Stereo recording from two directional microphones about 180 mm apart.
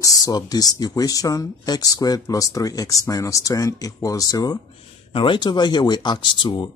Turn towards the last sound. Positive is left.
turn(degrees=25)  # may be behind; listen again after turning